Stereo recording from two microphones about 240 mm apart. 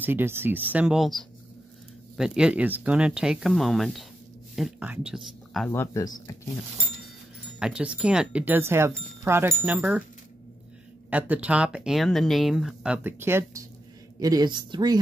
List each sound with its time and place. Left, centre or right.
0.0 s speech: centre
5.7 s speech: centre
7.5 s speech: centre
11.1 s speech: centre